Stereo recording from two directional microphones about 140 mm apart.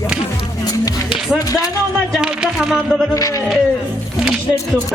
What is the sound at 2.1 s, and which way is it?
Speech, 5° right (ahead or behind).